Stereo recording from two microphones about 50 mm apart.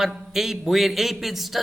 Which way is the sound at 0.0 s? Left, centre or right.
Centre.